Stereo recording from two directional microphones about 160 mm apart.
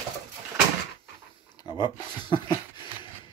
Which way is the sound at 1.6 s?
25° left (ahead or behind).